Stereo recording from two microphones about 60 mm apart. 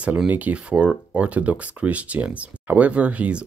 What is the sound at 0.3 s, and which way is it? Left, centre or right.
Speech, right.